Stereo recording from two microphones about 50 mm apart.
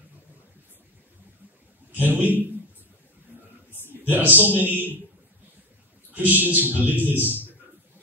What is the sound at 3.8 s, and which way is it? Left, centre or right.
Speech, right.